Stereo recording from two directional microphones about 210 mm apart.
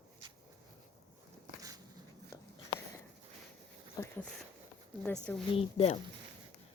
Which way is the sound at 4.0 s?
20° left (ahead or behind).